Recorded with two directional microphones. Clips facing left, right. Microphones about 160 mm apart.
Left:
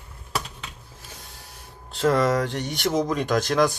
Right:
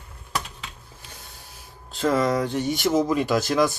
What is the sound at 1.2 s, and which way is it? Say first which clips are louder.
Speech: left 1 dB; centre (ahead or behind).